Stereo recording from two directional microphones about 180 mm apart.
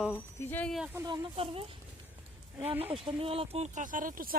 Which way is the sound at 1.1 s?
30° right (ahead or behind).